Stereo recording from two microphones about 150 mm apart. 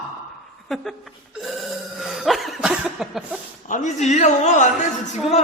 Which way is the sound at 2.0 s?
Centre (ahead or behind).